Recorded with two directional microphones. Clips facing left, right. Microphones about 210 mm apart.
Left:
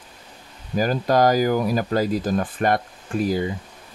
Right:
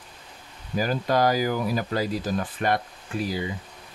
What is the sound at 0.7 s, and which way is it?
Speech, 45° left (ahead or behind).